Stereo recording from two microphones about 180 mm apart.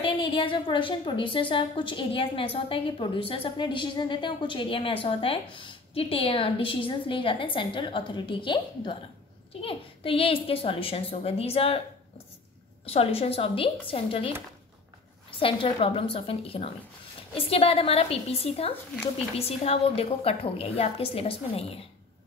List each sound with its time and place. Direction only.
0.0 s a woman's voice: 30° left (ahead or behind)
12.8 s a woman's voice: 35° left (ahead or behind)
15.3 s a woman's voice: 30° left (ahead or behind)